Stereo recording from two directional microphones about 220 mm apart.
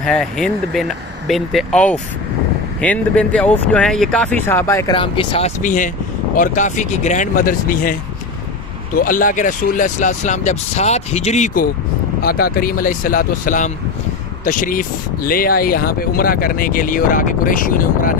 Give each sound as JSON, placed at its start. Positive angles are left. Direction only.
{"t": 0.0, "sound": "speech", "side_deg": 0}
{"t": 4.9, "sound": "speech", "side_deg": 25}
{"t": 9.0, "sound": "speech", "side_deg": 40}